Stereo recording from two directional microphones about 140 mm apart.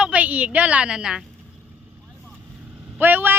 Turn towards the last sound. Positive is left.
turn(degrees=-15)  # may be behind; listen again after turning